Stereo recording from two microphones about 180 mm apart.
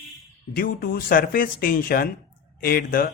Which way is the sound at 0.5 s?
55° left (ahead or behind).